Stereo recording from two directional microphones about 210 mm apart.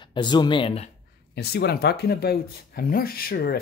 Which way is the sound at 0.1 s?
20° left (ahead or behind).